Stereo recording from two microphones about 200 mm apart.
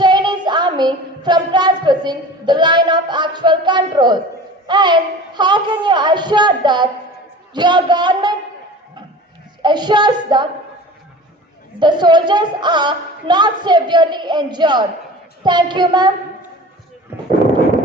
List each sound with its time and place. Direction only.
0.0 s a sound: 20° right (ahead or behind)
4.6 s a woman's voice: 20° right (ahead or behind)
9.6 s a woman's voice: 20° right (ahead or behind)
11.8 s a woman's voice: 20° right (ahead or behind)
17.1 s artillery fire: 10° right (ahead or behind)